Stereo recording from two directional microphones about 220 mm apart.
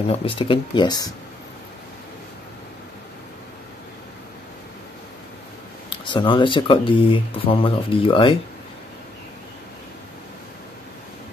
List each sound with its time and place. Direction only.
0.1 s speech: 25° left (ahead or behind)
5.9 s speech: 20° left (ahead or behind)